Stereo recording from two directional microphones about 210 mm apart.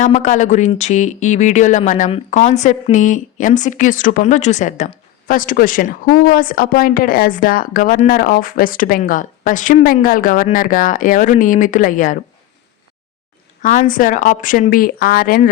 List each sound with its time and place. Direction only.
0.0 s speech: 35° left (ahead or behind)
13.6 s speech: 40° left (ahead or behind)